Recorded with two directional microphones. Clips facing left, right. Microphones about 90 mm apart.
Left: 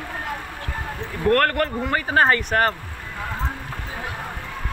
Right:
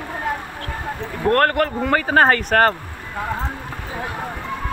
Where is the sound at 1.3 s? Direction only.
25° right (ahead or behind).